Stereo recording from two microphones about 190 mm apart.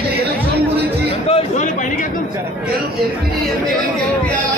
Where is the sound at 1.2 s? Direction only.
30° left (ahead or behind).